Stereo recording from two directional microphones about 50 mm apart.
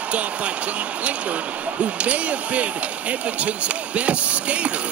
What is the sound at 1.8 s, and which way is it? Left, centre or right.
Speech, right.